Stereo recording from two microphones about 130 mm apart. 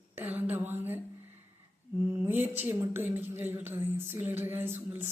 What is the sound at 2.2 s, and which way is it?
Speech, 15° right (ahead or behind).